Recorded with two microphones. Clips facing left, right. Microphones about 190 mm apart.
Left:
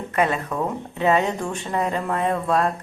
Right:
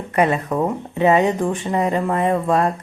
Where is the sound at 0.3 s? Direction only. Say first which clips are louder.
Right 5 dB; 20° right (ahead or behind).